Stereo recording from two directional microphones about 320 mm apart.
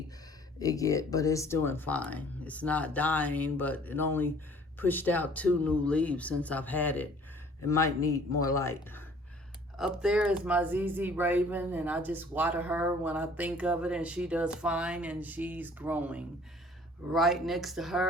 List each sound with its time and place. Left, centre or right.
0.6 s speech: centre